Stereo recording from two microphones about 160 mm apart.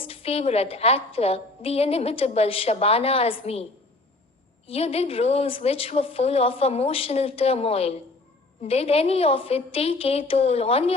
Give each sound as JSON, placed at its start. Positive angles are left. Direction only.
{"t": 0.0, "sound": "a woman's voice", "side_deg": 40}